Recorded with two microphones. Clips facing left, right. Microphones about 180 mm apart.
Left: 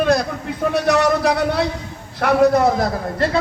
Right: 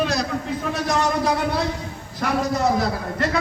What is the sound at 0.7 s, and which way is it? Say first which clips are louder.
Speech: left 6 dB; 70° left (ahead or behind).